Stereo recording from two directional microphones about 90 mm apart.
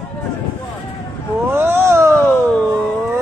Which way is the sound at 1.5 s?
25° right (ahead or behind).